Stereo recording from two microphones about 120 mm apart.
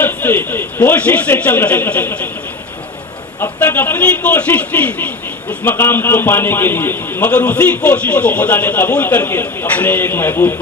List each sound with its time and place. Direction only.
0.0 s speech: 15° left (ahead or behind)
3.4 s a man's voice: 15° left (ahead or behind)